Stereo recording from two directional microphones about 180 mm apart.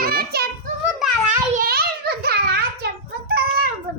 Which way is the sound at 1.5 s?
55° right (ahead or behind).